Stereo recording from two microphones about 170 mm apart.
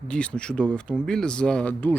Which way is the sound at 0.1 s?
5° left (ahead or behind).